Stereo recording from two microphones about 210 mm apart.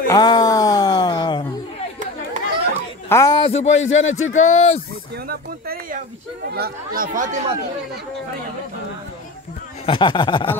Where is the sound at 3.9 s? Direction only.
70° left (ahead or behind).